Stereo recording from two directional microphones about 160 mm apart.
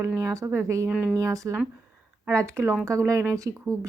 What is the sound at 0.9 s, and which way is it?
Speech, 5° right (ahead or behind).